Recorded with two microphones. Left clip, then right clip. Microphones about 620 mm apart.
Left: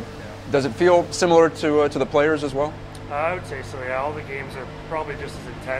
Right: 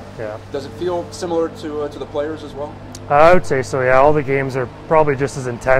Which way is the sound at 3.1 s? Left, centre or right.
Right.